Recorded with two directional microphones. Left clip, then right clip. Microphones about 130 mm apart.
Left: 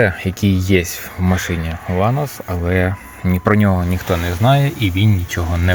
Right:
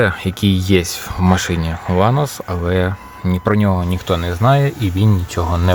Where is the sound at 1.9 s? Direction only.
35° right (ahead or behind).